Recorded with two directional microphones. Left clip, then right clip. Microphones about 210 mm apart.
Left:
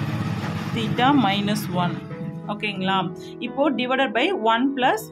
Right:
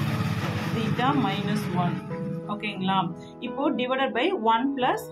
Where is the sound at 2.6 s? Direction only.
40° left (ahead or behind).